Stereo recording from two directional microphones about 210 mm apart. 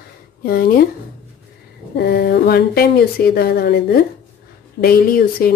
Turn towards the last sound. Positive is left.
turn(degrees=45)  # may be behind; listen again after turning